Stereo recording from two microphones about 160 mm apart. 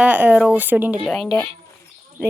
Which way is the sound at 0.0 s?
10° right (ahead or behind).